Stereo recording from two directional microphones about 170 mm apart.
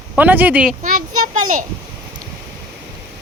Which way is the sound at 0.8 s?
50° right (ahead or behind).